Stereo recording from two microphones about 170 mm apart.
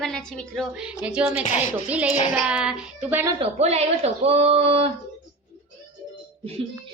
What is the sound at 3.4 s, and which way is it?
Speech, 40° right (ahead or behind).